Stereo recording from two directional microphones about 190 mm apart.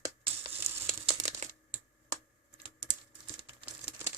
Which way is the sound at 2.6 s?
25° right (ahead or behind).